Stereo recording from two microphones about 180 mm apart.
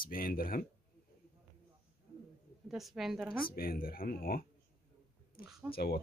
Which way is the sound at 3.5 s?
55° left (ahead or behind).